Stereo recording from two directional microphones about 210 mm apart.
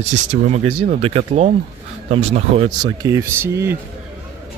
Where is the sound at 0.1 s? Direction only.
35° right (ahead or behind).